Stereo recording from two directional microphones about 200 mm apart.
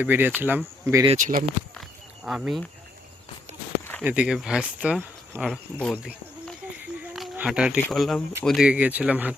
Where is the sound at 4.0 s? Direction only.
5° right (ahead or behind).